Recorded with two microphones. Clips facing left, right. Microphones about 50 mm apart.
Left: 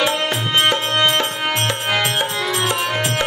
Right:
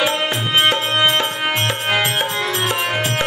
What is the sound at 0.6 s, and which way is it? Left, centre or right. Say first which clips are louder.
Music: right 1 dB; centre.